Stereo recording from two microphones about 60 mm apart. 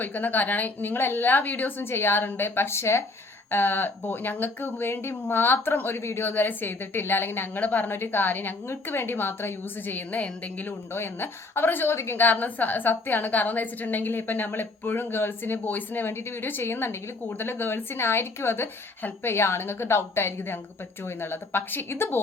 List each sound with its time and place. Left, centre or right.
0.0 s a woman's voice: left
3.5 s a woman's voice: left
6.2 s a woman's voice: left
10.9 s a woman's voice: left